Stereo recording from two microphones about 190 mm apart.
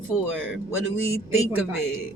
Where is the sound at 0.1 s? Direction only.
5° right (ahead or behind).